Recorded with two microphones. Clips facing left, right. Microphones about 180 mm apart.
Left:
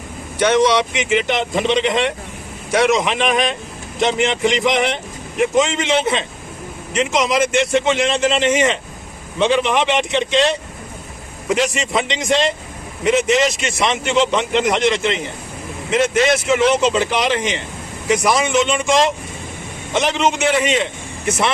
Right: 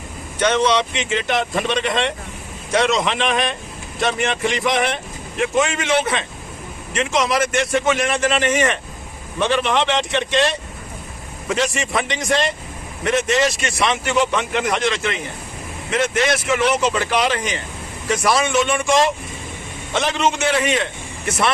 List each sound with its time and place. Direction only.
0.3 s a man's voice: 10° left (ahead or behind)